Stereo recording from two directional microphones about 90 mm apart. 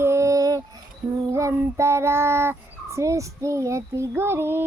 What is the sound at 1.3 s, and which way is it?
Child singing, 30° right (ahead or behind).